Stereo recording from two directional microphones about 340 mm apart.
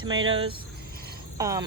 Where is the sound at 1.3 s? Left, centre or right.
Centre.